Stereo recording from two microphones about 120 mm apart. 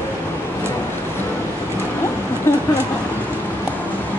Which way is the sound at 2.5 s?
20° left (ahead or behind).